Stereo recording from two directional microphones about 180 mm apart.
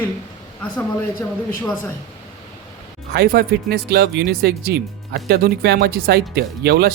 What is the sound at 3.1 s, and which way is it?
Speech, 60° right (ahead or behind).